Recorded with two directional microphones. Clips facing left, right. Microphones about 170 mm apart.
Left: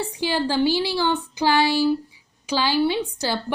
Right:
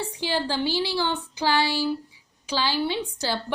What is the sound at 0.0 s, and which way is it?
A woman's voice, 10° left (ahead or behind).